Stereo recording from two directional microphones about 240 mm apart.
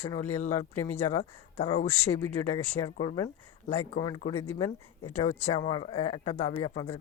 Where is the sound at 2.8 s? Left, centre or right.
Centre.